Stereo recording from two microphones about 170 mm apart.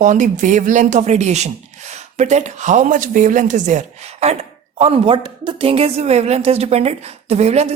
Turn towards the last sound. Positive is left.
turn(degrees=-40)  # may be behind; listen again after turning